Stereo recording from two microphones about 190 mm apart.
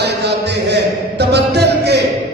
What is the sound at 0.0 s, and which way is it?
Speech, 60° right (ahead or behind).